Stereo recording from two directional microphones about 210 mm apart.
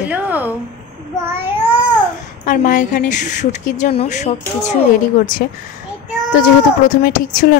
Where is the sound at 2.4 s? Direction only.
35° left (ahead or behind).